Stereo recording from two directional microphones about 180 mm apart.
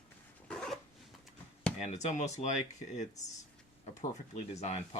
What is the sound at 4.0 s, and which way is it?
Speech, 40° left (ahead or behind).